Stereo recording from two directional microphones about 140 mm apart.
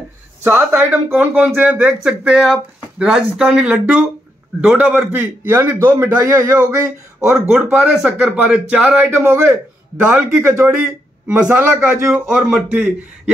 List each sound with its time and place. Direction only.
0.4 s speech: 15° right (ahead or behind)
7.3 s speech: centre (ahead or behind)
9.2 s a man's voice: 20° right (ahead or behind)